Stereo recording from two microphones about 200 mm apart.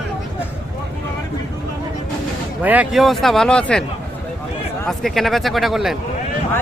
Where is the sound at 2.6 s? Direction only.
5° right (ahead or behind).